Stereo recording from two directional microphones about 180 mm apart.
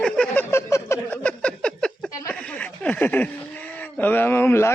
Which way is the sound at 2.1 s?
20° left (ahead or behind).